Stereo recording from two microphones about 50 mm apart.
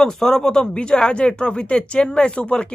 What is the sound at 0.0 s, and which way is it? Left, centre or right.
Speech, centre.